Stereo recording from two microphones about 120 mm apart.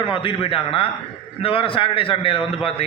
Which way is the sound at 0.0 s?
45° left (ahead or behind).